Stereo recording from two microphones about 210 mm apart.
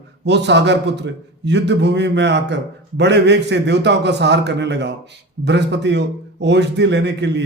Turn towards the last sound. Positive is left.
turn(degrees=-55)  # may be behind; listen again after turning